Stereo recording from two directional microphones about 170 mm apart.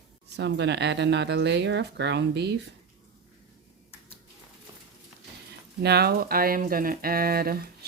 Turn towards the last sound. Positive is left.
turn(degrees=-60)  # may be behind; listen again after turning